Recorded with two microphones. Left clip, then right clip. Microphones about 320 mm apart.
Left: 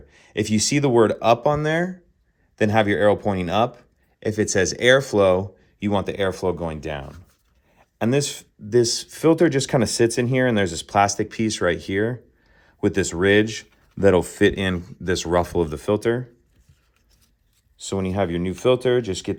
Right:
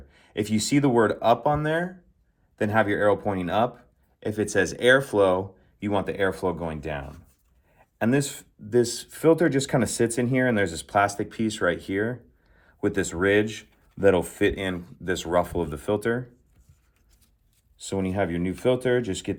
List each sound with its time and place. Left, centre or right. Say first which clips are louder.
0.1 s speech: left 4 dB; left
7.8 s speech: left 3 dB; left
17.7 s speech: left 3 dB; left